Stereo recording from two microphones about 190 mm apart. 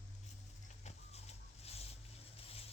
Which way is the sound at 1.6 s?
35° left (ahead or behind).